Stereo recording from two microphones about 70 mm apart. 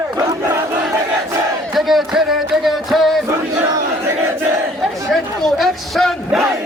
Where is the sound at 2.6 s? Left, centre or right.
Centre.